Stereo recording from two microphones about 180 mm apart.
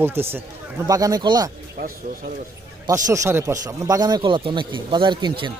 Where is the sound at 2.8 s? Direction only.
20° right (ahead or behind).